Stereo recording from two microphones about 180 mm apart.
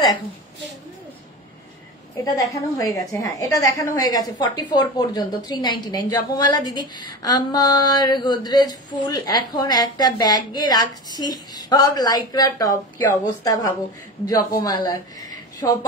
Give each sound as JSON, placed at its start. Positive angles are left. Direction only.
{"t": 2.2, "sound": "speech", "side_deg": 20}